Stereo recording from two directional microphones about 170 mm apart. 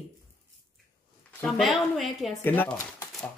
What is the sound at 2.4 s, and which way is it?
Speech, 10° left (ahead or behind).